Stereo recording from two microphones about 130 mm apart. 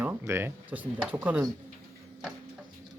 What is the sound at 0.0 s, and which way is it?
Speech, 20° right (ahead or behind).